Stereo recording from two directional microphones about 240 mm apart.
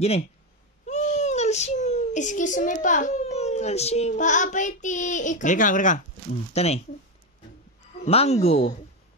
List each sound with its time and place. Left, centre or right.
0.8 s a child's voice: left
8.0 s speech: left